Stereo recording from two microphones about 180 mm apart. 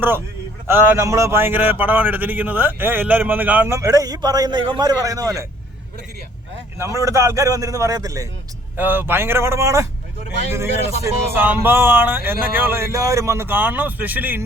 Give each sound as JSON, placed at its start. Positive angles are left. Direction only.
{"t": 0.7, "sound": "a man's voice", "side_deg": -15}
{"t": 6.7, "sound": "a man's voice", "side_deg": -15}